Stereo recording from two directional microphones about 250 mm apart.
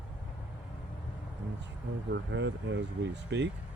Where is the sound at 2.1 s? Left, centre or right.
Right.